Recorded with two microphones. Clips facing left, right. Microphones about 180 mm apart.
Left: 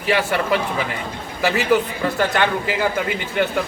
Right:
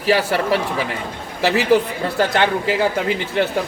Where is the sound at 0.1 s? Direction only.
35° right (ahead or behind).